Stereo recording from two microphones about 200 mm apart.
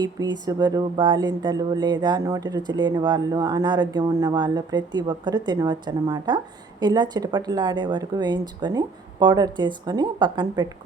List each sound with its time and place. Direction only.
0.0 s speech: 20° right (ahead or behind)